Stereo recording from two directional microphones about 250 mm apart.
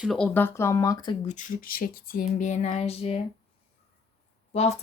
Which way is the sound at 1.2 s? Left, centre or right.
Left.